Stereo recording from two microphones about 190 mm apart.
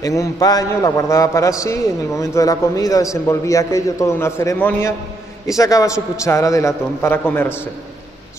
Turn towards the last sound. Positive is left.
turn(degrees=10)  # may be behind; listen again after turning